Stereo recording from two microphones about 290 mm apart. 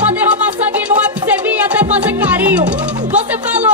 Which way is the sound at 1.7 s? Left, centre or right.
Centre.